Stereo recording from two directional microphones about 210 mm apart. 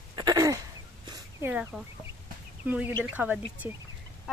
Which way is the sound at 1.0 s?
20° right (ahead or behind).